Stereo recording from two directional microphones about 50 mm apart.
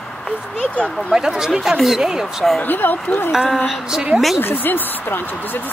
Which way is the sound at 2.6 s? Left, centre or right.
Left.